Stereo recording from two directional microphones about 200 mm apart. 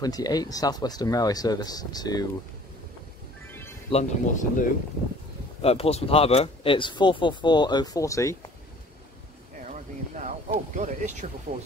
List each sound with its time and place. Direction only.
0.0 s speech: 20° left (ahead or behind)
3.4 s music: 10° left (ahead or behind)
3.9 s speech: 40° left (ahead or behind); by 8.5 s 15° left (ahead or behind)
9.7 s a sound: 35° right (ahead or behind)
10.8 s speech: 35° right (ahead or behind)